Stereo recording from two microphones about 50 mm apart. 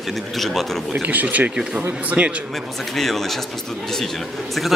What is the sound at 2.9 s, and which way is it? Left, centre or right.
Speech, centre.